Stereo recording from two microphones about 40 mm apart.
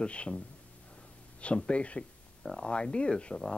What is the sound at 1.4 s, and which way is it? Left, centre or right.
Speech, left.